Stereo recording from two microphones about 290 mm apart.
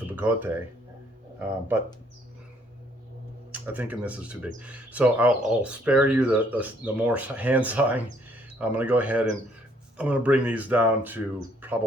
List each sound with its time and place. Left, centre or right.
0.2 s speech: centre
3.5 s speech: centre